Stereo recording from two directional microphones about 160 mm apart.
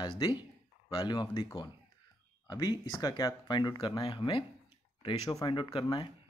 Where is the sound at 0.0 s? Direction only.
30° left (ahead or behind).